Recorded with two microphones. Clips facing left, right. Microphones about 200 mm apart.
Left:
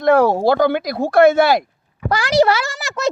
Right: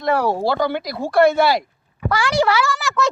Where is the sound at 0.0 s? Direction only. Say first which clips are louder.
Left 6 dB; 50° left (ahead or behind).